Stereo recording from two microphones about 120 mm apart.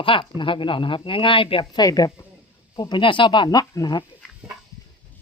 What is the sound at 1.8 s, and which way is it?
Speech, 30° left (ahead or behind).